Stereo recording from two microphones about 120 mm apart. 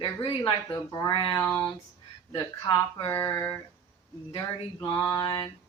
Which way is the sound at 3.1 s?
20° left (ahead or behind).